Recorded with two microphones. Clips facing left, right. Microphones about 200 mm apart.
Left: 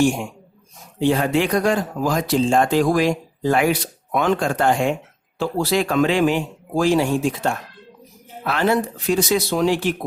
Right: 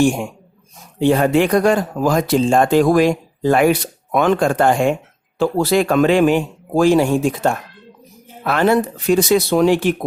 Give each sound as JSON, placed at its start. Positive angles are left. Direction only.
{"t": 0.9, "sound": "speech", "side_deg": -55}